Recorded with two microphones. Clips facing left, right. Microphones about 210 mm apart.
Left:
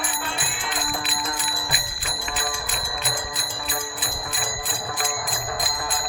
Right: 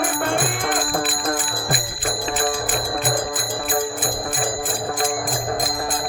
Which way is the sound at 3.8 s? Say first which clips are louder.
Right 9 dB; 50° right (ahead or behind).